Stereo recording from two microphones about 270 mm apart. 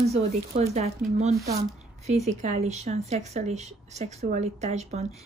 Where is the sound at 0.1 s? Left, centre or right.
Right.